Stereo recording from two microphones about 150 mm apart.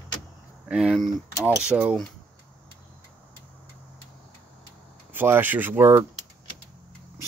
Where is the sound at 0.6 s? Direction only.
5° right (ahead or behind).